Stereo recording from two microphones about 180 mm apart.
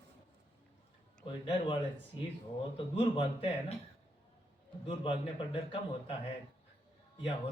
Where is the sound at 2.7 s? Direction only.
30° left (ahead or behind).